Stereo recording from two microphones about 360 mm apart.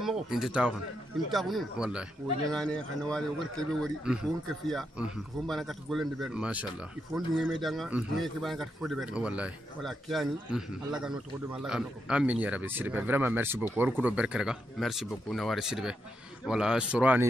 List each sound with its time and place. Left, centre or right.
0.0 s a man's voice: centre